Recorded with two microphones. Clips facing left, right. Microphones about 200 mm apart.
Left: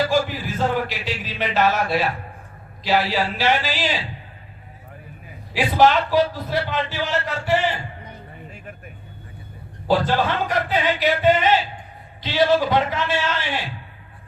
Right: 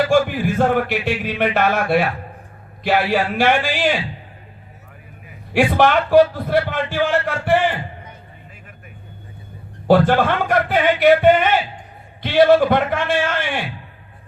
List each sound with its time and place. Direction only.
0.0 s a sound: 55° right (ahead or behind)
2.8 s a man's voice: 55° right (ahead or behind)
5.5 s a man's voice: 55° right (ahead or behind)
9.8 s a man's voice: 55° right (ahead or behind)